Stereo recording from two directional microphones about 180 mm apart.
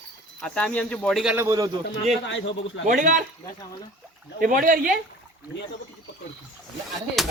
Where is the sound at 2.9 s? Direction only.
45° right (ahead or behind).